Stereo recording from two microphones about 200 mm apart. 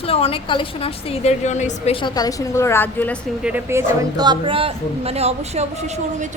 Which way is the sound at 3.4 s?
10° right (ahead or behind).